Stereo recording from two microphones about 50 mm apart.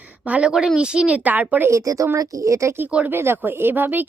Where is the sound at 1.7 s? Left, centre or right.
Right.